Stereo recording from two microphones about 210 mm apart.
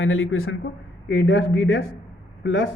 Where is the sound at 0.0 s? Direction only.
70° left (ahead or behind).